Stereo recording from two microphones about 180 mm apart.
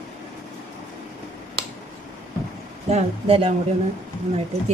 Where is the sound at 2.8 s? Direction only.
35° right (ahead or behind).